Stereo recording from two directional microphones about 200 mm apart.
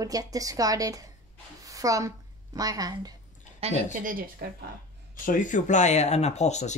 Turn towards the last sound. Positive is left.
turn(degrees=35)  # may be behind; listen again after turning